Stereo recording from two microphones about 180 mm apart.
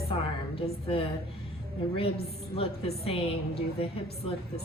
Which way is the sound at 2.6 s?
35° left (ahead or behind).